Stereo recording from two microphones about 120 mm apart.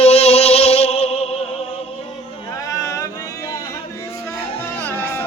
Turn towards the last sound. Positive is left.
turn(degrees=15)  # may be behind; listen again after turning